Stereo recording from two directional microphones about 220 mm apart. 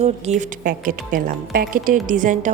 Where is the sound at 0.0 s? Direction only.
30° right (ahead or behind).